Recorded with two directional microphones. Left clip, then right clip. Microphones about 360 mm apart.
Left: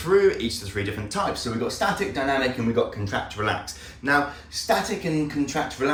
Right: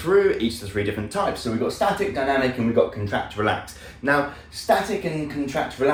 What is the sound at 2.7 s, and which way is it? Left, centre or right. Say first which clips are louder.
Speech: right 3 dB; centre.